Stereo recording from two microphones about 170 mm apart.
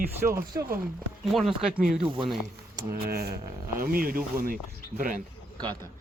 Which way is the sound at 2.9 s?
60° right (ahead or behind).